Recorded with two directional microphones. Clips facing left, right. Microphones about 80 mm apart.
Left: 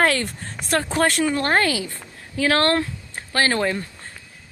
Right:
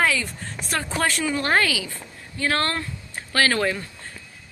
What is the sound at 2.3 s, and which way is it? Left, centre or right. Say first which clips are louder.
Speech: left 5 dB; left.